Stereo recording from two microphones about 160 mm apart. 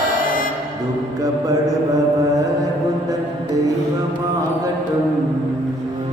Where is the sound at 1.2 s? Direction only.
20° right (ahead or behind).